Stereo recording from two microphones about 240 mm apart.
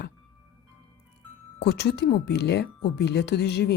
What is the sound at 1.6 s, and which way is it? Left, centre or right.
Speech, left.